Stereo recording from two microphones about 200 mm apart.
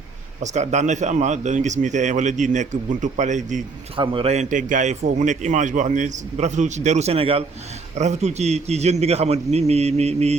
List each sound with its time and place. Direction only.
0.4 s a man's voice: 35° right (ahead or behind)
3.9 s a man's voice: 25° right (ahead or behind)